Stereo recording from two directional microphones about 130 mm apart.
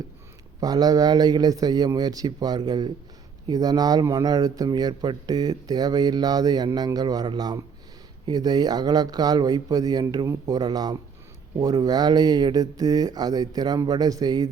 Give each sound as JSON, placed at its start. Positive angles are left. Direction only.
{"t": 0.6, "sound": "speech", "side_deg": -30}